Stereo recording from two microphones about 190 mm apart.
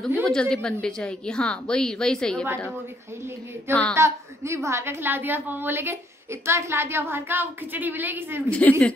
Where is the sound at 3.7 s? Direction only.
5° left (ahead or behind).